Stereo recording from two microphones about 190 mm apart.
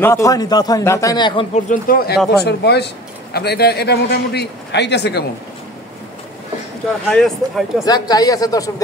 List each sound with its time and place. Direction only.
0.0 s a man's voice: 15° left (ahead or behind)
1.7 s a man's voice: 50° left (ahead or behind)
7.1 s speech: centre (ahead or behind)
7.8 s a man's voice: 20° left (ahead or behind)